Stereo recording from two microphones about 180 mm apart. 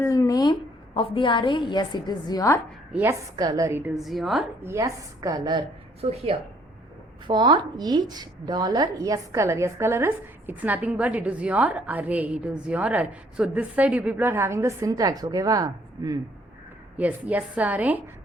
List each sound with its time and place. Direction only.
0.0 s a sound: 20° left (ahead or behind)
0.9 s a woman's voice: 30° left (ahead or behind)
2.9 s a woman's voice: 15° right (ahead or behind)
4.6 s a woman's voice: 15° right (ahead or behind)
17.0 s a woman's voice: 10° right (ahead or behind)